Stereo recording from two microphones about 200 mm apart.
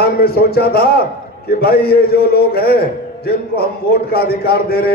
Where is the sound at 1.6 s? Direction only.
50° left (ahead or behind).